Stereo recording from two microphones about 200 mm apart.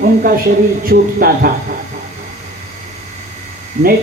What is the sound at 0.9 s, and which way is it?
Speech, 45° right (ahead or behind).